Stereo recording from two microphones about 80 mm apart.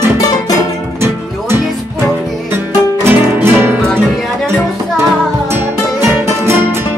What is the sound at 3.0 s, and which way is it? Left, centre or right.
Music, right.